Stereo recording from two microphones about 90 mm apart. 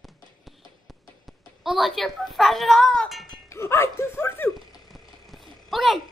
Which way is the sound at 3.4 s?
30° left (ahead or behind).